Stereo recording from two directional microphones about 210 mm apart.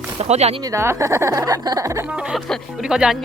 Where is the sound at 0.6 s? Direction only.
15° right (ahead or behind).